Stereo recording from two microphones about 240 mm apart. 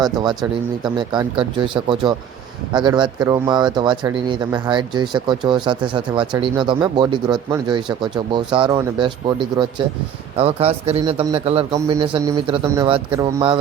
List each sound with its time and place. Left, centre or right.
0.0 s speech: centre